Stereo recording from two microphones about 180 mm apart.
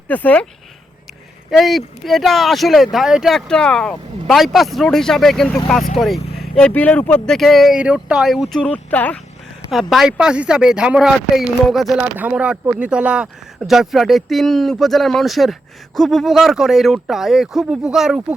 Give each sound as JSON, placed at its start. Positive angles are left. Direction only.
{"t": 0.1, "sound": "speech", "side_deg": 10}
{"t": 1.5, "sound": "speech", "side_deg": 0}
{"t": 6.6, "sound": "speech", "side_deg": 5}